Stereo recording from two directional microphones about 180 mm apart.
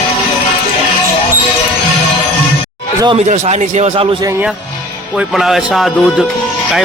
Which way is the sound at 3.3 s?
40° right (ahead or behind).